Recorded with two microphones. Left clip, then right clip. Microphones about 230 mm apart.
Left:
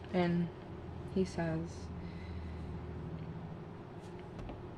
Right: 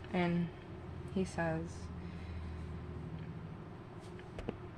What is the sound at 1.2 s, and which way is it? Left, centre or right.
Speech, right.